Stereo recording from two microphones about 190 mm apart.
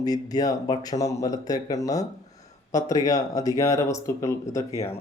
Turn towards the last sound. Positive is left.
turn(degrees=15)  # may be behind; listen again after turning